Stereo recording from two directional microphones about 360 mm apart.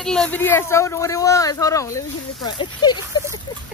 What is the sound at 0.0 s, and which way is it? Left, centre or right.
A man's voice, centre.